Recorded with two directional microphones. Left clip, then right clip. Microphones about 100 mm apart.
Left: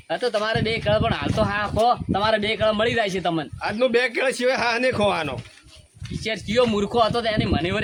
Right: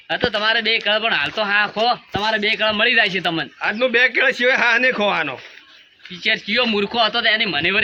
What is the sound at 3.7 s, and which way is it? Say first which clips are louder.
A man's voice: right 4 dB; 15° left (ahead or behind).